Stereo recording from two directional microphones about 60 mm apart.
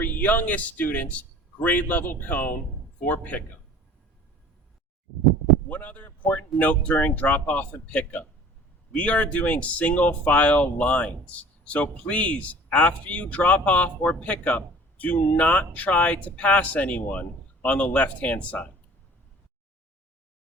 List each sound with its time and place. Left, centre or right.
0.0 s speech: left
5.6 s speech: left